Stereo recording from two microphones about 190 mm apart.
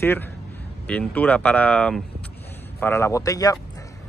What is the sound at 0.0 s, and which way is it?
Speech, 10° left (ahead or behind).